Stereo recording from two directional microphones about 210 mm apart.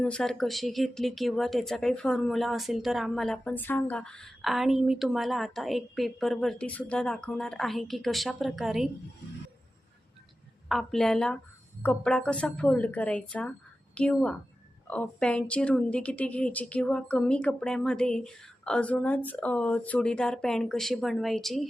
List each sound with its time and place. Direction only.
0.0 s speech: 5° left (ahead or behind)
10.7 s a woman's voice: centre (ahead or behind)